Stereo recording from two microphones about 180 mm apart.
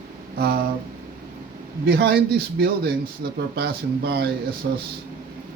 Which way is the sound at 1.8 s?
65° right (ahead or behind).